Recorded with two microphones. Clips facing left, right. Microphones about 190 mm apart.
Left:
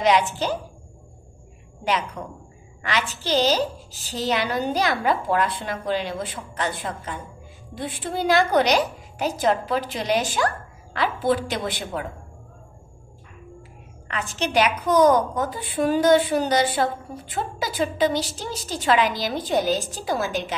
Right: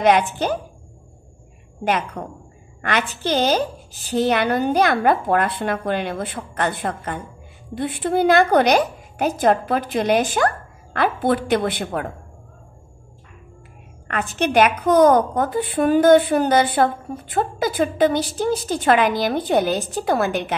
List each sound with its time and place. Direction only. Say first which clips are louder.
0.0 s a woman's voice: right 3 dB; 55° right (ahead or behind)
1.9 s a woman's voice: right 3 dB; 50° right (ahead or behind)
14.3 s a woman's voice: right 5 dB; 55° right (ahead or behind)